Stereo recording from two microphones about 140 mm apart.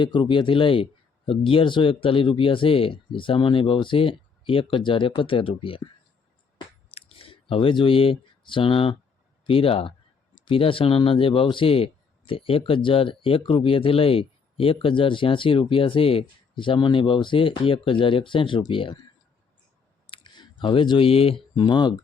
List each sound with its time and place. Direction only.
0.0 s speech: 35° left (ahead or behind)
6.9 s chewing: 45° left (ahead or behind)
7.5 s speech: 40° left (ahead or behind)
20.1 s clicking: 35° left (ahead or behind)
21.5 s speech: 35° left (ahead or behind)